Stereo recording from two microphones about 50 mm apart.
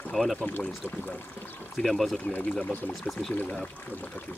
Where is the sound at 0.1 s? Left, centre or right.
Centre.